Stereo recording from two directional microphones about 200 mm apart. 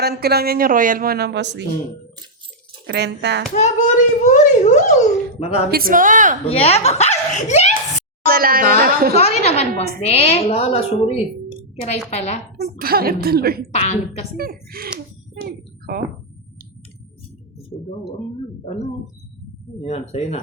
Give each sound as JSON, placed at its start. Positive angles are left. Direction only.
{"t": 0.0, "sound": "speech", "side_deg": -50}
{"t": 2.8, "sound": "speech", "side_deg": -55}
{"t": 3.5, "sound": "a child's voice", "side_deg": 35}
{"t": 5.7, "sound": "a woman's voice", "side_deg": -45}
{"t": 6.4, "sound": "a child's voice", "side_deg": 30}
{"t": 8.3, "sound": "speech", "side_deg": -45}
{"t": 9.1, "sound": "a child's voice", "side_deg": 30}
{"t": 12.1, "sound": "a child's voice", "side_deg": 35}
{"t": 12.6, "sound": "speech", "side_deg": -50}
{"t": 13.7, "sound": "a child's voice", "side_deg": 30}
{"t": 14.3, "sound": "speech", "side_deg": -50}
{"t": 19.8, "sound": "a child's voice", "side_deg": 30}